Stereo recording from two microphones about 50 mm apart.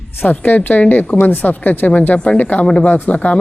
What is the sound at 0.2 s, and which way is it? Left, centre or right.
Speech, left.